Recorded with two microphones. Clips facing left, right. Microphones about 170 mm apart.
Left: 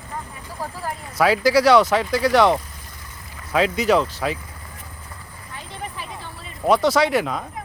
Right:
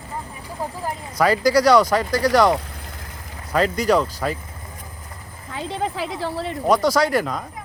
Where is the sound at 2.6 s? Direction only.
70° right (ahead or behind).